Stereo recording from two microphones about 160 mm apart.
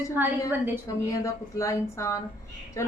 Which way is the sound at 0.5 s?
15° right (ahead or behind).